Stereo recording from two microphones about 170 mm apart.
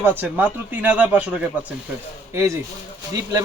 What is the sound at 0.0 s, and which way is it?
Speech, 10° right (ahead or behind).